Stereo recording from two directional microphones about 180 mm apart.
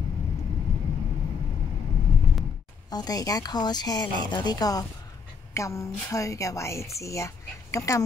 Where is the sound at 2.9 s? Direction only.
20° left (ahead or behind).